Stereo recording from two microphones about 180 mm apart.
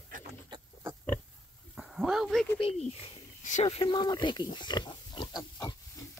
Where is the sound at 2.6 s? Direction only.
35° left (ahead or behind).